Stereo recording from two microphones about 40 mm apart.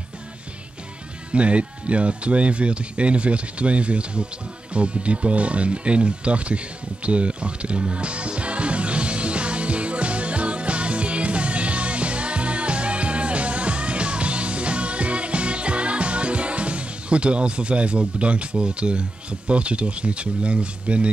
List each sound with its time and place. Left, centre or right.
1.3 s speech: right
7.1 s music: right